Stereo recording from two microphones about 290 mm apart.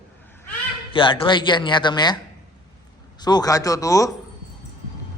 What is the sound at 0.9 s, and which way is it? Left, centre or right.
A man's voice, centre.